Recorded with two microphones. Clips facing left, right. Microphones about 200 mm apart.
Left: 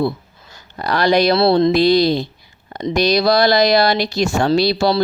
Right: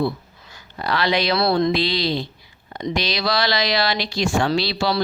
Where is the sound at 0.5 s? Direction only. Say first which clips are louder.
Left 4 dB; 45° left (ahead or behind).